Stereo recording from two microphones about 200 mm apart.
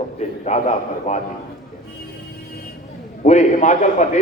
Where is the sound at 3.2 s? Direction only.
35° left (ahead or behind).